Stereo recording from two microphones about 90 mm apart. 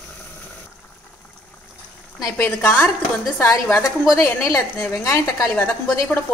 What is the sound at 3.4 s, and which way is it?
A woman's voice, 40° left (ahead or behind).